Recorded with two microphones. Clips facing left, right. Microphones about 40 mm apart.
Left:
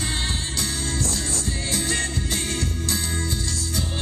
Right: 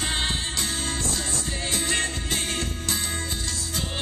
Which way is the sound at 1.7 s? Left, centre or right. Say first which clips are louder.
Even; right.